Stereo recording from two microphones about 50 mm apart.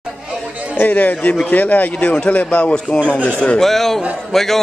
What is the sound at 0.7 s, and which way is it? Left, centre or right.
Speech, left.